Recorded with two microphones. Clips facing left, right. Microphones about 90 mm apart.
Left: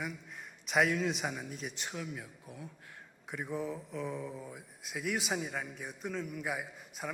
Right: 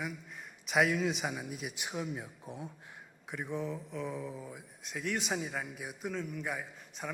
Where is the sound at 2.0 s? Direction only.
25° right (ahead or behind).